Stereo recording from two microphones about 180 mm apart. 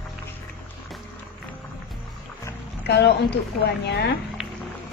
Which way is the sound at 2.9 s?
70° left (ahead or behind).